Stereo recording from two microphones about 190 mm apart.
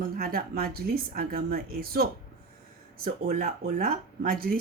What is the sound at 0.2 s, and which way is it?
Speech, 50° right (ahead or behind).